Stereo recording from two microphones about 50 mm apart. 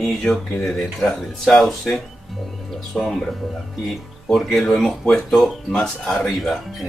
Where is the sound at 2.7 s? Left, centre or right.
Centre.